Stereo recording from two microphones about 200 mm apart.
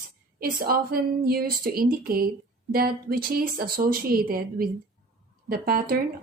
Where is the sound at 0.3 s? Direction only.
45° right (ahead or behind).